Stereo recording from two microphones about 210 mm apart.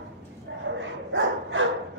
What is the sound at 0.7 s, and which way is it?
Dog, 65° right (ahead or behind).